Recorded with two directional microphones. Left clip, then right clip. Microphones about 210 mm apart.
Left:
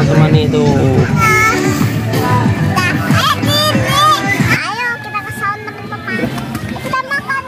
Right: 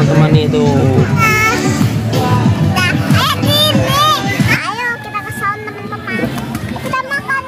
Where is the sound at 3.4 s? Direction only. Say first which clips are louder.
Right 1 dB; 30° right (ahead or behind).